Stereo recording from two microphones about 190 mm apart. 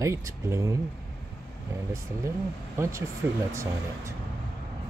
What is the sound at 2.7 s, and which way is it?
Speech, 15° right (ahead or behind).